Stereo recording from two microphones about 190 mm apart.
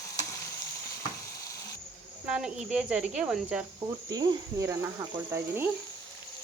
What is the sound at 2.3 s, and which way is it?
Speech, 5° right (ahead or behind).